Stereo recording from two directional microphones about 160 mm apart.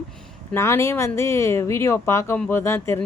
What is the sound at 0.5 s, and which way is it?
Speech, 15° left (ahead or behind).